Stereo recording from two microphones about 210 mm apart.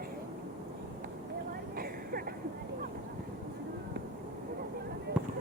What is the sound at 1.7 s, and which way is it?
Vehicle, 45° right (ahead or behind).